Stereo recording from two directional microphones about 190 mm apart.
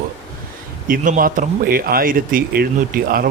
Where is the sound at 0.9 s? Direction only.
45° right (ahead or behind).